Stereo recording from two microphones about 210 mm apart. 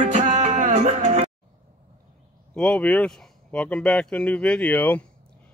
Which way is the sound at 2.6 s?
5° left (ahead or behind).